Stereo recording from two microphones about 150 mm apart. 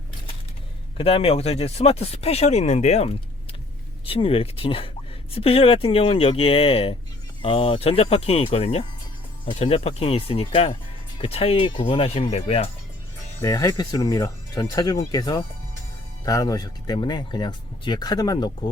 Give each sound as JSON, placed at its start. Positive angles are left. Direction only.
{"t": 0.9, "sound": "speech", "side_deg": 40}
{"t": 13.4, "sound": "speech", "side_deg": 25}